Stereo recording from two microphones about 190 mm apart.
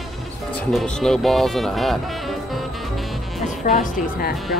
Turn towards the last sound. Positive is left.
turn(degrees=45)  # may be behind; listen again after turning